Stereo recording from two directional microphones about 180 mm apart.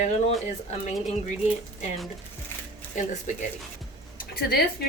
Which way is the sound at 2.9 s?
45° left (ahead or behind).